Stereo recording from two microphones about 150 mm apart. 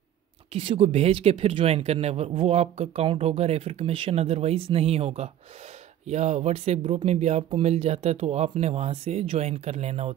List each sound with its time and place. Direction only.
0.5 s speech: 40° right (ahead or behind)